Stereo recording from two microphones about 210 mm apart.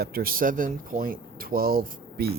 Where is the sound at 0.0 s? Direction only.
45° right (ahead or behind).